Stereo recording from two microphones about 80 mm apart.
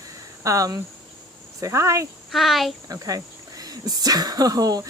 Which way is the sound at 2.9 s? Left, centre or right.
Right.